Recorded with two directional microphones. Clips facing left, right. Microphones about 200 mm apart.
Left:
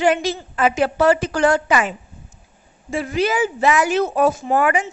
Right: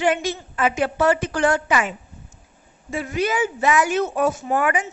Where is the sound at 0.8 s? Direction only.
35° left (ahead or behind).